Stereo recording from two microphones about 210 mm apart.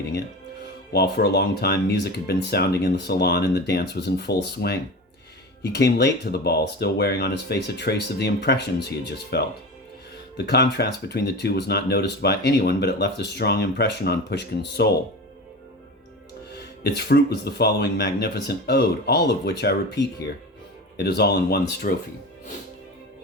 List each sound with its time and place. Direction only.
0.9 s speech: 50° left (ahead or behind)
16.6 s speech: 50° left (ahead or behind)